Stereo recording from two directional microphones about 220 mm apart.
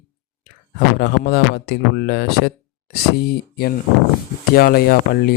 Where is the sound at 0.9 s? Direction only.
45° left (ahead or behind).